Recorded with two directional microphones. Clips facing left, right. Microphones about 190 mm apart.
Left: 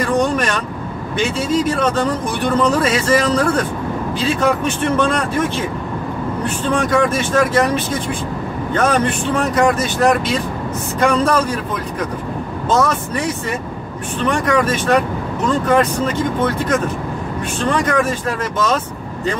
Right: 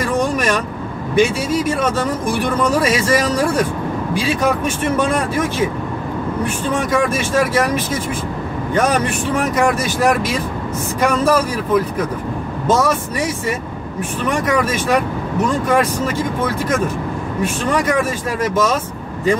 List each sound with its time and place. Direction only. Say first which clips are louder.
0.1 s vehicle: even; 10° right (ahead or behind)
1.1 s speech: right 2 dB; 10° right (ahead or behind)
14.4 s speech: left 1 dB; 10° right (ahead or behind)